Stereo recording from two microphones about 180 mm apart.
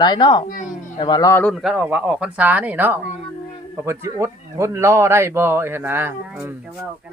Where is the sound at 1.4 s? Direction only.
Centre (ahead or behind).